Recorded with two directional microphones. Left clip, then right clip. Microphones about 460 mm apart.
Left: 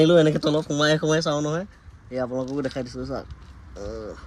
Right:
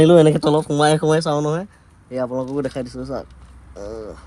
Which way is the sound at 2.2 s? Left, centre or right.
Right.